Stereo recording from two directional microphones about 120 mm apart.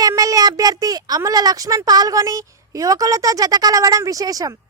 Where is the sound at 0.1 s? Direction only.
30° right (ahead or behind).